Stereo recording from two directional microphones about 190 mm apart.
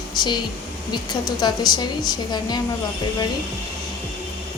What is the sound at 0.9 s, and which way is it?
A woman's voice, 20° left (ahead or behind).